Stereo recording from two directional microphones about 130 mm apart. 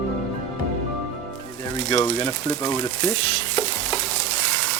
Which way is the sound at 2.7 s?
50° left (ahead or behind).